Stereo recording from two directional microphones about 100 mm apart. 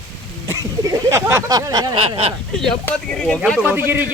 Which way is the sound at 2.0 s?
75° right (ahead or behind).